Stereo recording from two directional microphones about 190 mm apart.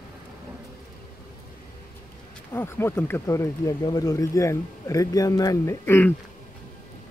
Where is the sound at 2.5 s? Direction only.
10° left (ahead or behind).